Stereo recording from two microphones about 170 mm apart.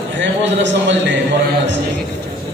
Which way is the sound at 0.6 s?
90° right.